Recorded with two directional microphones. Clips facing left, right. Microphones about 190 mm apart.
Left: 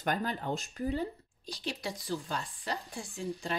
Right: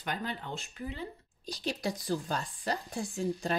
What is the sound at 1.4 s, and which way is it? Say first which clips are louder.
Speech: right 4 dB; 40° right (ahead or behind).